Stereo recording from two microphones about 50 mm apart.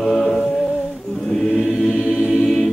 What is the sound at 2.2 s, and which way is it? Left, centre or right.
Choir, centre.